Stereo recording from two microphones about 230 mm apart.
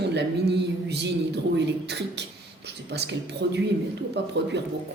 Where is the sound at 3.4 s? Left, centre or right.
Right.